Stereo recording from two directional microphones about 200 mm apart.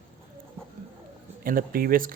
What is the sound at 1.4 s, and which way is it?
Speech, 45° right (ahead or behind).